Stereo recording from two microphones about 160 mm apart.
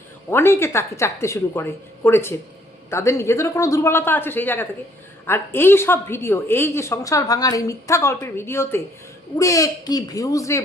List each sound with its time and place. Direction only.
0.3 s a man's voice: 15° left (ahead or behind)